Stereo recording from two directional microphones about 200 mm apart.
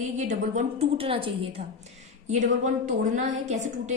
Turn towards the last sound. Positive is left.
turn(degrees=-35)  # may be behind; listen again after turning